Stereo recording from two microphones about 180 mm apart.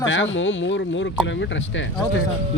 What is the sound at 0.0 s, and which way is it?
Speech, 90° left.